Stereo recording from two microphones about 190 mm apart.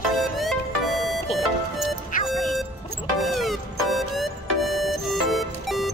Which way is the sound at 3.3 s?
Centre (ahead or behind).